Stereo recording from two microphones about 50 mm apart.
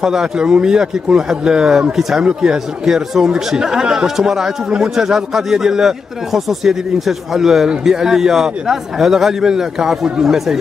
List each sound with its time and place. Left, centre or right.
0.0 s speech: centre